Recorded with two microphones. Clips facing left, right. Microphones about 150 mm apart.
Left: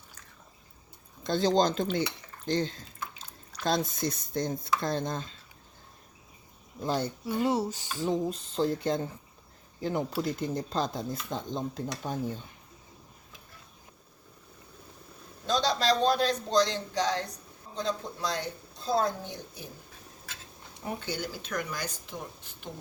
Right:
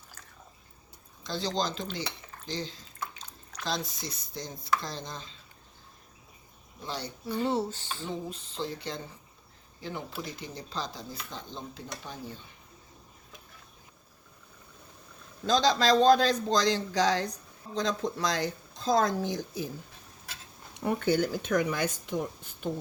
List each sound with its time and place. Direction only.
1.2 s speech: 50° left (ahead or behind)
6.8 s speech: 50° left (ahead or behind)
7.3 s speech: 10° left (ahead or behind)
8.0 s a sound: 40° left (ahead or behind)
9.8 s speech: 45° left (ahead or behind)
15.4 s speech: 90° right
20.8 s speech: 55° right (ahead or behind)